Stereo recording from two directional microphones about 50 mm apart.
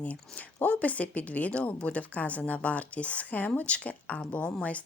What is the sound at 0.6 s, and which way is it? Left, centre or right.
A woman's voice, left.